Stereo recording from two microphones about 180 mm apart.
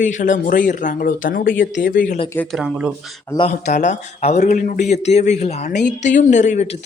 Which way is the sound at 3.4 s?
40° left (ahead or behind).